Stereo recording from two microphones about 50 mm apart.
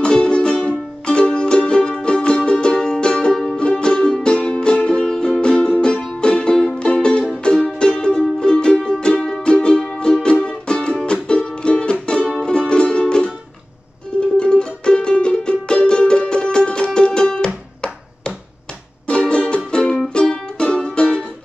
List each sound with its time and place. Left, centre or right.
0.0 s music: left
6.5 s music: centre
6.8 s music: centre
14.3 s music: centre
19.0 s music: left